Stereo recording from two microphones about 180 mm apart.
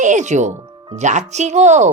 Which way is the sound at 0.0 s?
40° right (ahead or behind).